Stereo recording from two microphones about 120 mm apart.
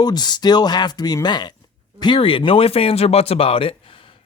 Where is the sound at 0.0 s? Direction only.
35° left (ahead or behind).